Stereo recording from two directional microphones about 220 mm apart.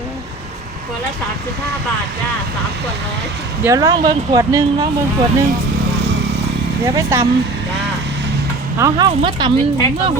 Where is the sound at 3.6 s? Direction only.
15° right (ahead or behind).